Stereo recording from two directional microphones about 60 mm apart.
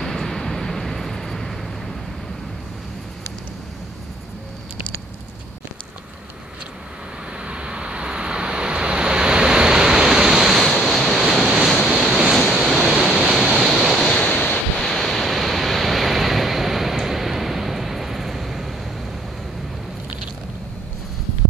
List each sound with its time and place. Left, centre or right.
0.0 s vehicle: centre
7.4 s vehicle: centre
11.9 s waves: centre
14.1 s waves: left
14.8 s waves: centre